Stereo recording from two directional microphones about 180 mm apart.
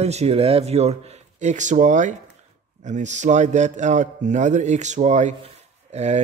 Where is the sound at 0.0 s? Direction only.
35° right (ahead or behind).